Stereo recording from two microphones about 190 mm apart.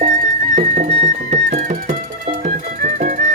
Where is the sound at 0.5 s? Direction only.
40° right (ahead or behind).